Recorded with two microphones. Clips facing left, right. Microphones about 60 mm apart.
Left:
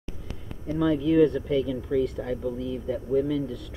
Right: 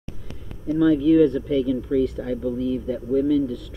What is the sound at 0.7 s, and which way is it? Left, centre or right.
Speech, centre.